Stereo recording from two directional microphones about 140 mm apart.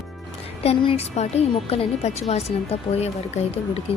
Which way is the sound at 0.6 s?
40° left (ahead or behind).